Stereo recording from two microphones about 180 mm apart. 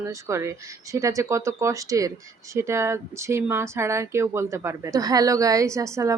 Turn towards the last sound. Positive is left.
turn(degrees=-15)  # may be behind; listen again after turning